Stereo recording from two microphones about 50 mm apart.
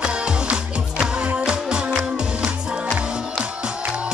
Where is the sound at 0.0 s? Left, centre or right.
Centre.